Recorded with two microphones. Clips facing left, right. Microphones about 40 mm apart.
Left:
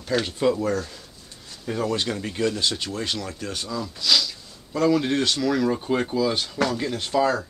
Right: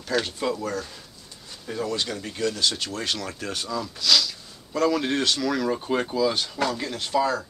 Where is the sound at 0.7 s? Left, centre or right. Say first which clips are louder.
Left 2 dB; centre.